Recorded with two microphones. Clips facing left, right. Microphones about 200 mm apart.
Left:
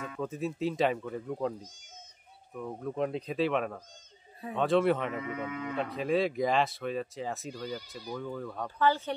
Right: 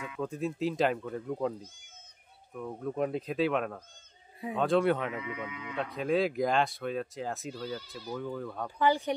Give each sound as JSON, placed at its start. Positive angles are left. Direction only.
{"t": 0.2, "sound": "speech", "side_deg": 0}
{"t": 2.5, "sound": "speech", "side_deg": 0}
{"t": 5.1, "sound": "speech", "side_deg": 45}
{"t": 5.8, "sound": "speech", "side_deg": 0}
{"t": 8.6, "sound": "speech", "side_deg": -15}